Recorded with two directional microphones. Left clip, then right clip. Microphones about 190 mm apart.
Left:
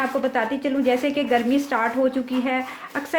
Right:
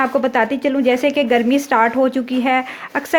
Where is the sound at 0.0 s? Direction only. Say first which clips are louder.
Right 6 dB; 45° right (ahead or behind).